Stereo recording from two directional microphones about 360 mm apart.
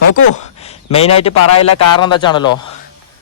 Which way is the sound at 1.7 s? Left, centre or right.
Left.